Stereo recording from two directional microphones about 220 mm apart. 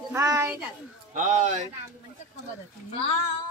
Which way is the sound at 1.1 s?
35° right (ahead or behind).